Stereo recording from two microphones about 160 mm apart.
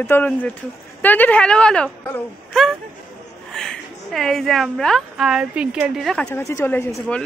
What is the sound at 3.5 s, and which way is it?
A woman's voice, 5° left (ahead or behind).